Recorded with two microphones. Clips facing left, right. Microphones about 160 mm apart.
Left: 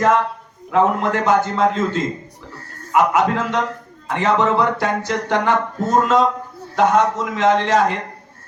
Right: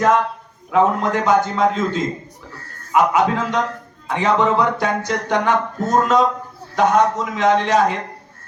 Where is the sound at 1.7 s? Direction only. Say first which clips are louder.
Even; 10° right (ahead or behind).